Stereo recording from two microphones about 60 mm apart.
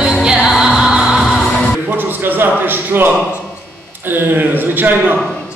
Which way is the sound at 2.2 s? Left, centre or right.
Right.